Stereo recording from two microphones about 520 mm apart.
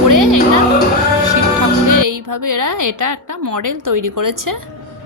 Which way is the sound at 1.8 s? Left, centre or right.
Right.